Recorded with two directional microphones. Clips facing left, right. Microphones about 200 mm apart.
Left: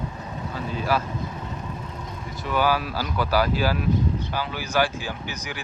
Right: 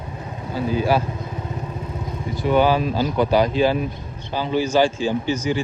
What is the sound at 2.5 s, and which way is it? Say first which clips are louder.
Speech: right 6 dB; 25° right (ahead or behind).